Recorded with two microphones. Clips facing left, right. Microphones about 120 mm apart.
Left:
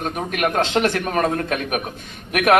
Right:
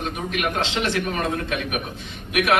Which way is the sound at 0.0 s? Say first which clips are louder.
Left 3 dB; 45° left (ahead or behind).